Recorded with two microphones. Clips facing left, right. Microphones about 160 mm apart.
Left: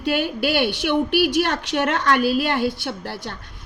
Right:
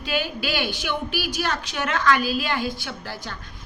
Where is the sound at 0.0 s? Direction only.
60° left (ahead or behind).